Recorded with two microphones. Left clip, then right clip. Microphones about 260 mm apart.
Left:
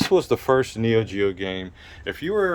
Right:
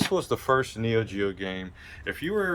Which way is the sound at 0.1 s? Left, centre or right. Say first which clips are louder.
Left 9 dB; left.